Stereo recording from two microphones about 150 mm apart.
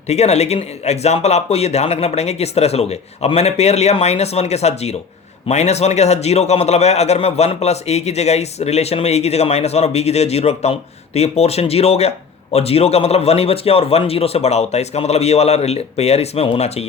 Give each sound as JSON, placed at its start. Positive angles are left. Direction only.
{"t": 0.1, "sound": "a man's voice", "side_deg": 45}